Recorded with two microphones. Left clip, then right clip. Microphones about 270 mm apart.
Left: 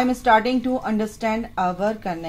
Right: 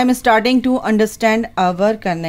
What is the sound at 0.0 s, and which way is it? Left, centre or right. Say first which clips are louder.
A woman's voice: right 4 dB; right.